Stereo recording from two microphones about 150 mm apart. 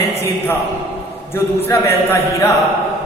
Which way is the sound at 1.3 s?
15° left (ahead or behind).